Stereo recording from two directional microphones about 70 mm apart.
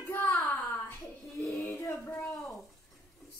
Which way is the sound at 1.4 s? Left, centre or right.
Left.